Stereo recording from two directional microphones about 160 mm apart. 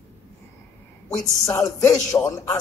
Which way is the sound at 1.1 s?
20° left (ahead or behind).